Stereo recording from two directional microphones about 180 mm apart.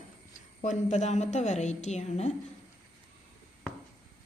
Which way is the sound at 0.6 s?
40° left (ahead or behind).